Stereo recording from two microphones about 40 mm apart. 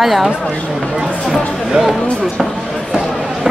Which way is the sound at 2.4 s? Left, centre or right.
Centre.